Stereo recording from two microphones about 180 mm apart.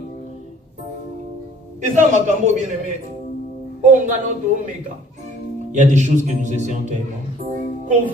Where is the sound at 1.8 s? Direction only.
45° right (ahead or behind).